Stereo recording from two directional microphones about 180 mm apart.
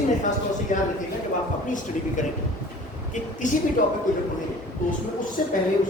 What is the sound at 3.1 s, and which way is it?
Speech, 45° left (ahead or behind).